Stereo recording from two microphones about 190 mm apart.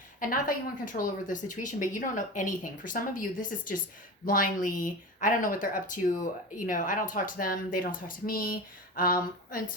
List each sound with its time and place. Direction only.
0.2 s speech: 45° left (ahead or behind)